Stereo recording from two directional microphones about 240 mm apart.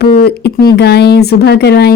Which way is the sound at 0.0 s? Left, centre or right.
Left.